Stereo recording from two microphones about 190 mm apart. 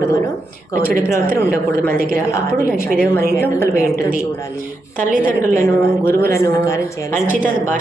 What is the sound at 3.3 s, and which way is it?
Speech, 15° left (ahead or behind).